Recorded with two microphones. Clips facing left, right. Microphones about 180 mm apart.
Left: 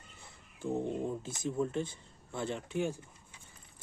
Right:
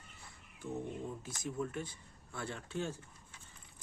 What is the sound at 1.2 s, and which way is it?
Speech, 25° left (ahead or behind).